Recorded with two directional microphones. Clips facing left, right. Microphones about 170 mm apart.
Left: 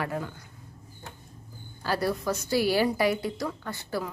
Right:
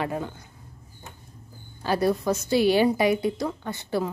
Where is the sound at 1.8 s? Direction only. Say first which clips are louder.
Right 5 dB; 20° right (ahead or behind).